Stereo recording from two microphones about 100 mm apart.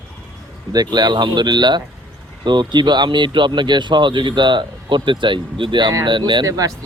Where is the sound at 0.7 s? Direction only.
40° right (ahead or behind).